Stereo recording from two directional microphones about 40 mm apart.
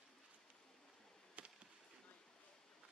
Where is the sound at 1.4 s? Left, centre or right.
Right.